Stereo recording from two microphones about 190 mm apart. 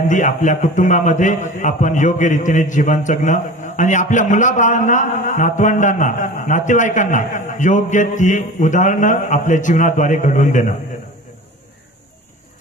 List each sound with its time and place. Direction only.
0.1 s a man's voice: 40° left (ahead or behind)